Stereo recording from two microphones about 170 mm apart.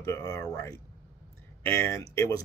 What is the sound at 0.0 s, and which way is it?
Speech, 15° left (ahead or behind).